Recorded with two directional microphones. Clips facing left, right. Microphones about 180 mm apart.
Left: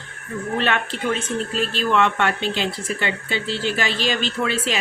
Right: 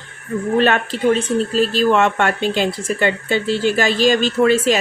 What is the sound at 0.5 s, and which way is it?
Speech, 40° right (ahead or behind).